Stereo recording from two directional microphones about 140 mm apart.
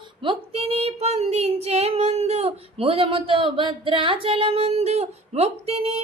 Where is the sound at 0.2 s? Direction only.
40° right (ahead or behind).